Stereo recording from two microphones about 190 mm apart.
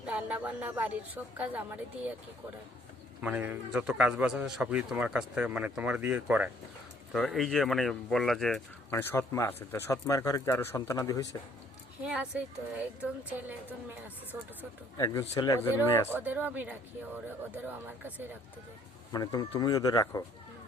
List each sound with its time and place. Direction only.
0.0 s a man's voice: 5° right (ahead or behind)
3.2 s a man's voice: 5° right (ahead or behind)
8.9 s speech: 10° left (ahead or behind)
12.0 s speech: 5° right (ahead or behind)
14.6 s speech: 15° left (ahead or behind)
16.0 s a man's voice: 10° right (ahead or behind)
19.1 s speech: 20° left (ahead or behind)